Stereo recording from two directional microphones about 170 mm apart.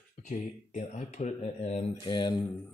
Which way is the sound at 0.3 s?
45° left (ahead or behind).